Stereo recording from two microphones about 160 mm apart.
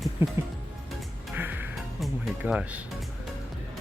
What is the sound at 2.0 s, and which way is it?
Speech, 10° right (ahead or behind).